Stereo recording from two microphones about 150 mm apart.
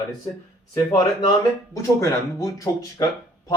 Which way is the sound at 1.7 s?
20° left (ahead or behind).